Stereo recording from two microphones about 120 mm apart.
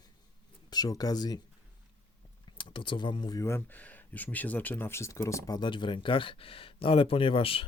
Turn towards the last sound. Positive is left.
turn(degrees=50)  # may be behind; listen again after turning